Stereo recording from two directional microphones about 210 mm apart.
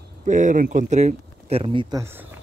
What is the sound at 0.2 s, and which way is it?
Speech, 35° right (ahead or behind).